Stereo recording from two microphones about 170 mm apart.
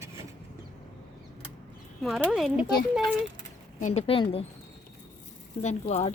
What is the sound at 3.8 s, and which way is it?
Speech, 40° left (ahead or behind).